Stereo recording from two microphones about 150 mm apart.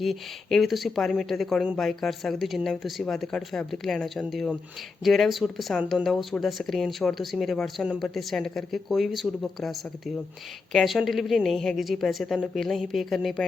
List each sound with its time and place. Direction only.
0.0 s speech: centre (ahead or behind)